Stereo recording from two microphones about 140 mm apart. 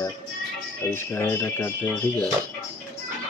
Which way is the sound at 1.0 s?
15° left (ahead or behind).